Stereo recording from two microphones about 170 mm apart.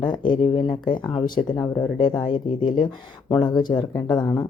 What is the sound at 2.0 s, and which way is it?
Speech, 25° left (ahead or behind).